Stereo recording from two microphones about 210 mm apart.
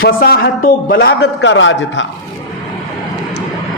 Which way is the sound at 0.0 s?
45° left (ahead or behind).